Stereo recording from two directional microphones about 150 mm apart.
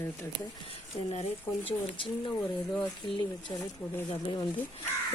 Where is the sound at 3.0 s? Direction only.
30° left (ahead or behind).